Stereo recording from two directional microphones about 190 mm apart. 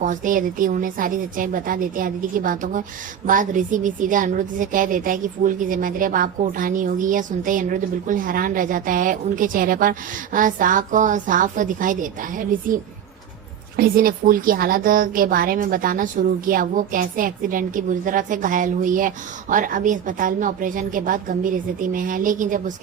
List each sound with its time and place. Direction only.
0.0 s a woman's voice: 45° right (ahead or behind)